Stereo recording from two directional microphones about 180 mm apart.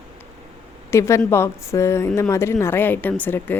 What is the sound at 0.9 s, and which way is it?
Speech, 15° left (ahead or behind).